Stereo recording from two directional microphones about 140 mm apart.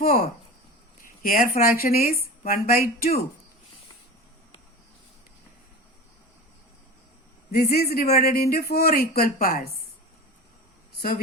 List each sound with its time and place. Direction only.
0.0 s speech: 90° left
7.5 s speech: 90° left